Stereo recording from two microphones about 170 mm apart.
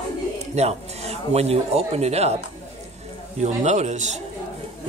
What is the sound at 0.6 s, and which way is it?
Speech, 40° right (ahead or behind).